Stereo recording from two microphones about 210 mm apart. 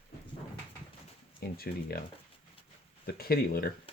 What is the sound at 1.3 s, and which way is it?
Speech, 45° left (ahead or behind).